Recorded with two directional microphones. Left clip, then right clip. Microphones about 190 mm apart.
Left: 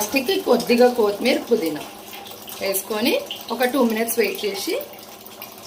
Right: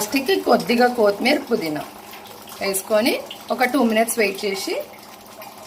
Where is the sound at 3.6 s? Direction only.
35° right (ahead or behind).